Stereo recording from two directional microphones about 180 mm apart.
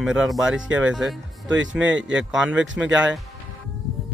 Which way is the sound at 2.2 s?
5° right (ahead or behind).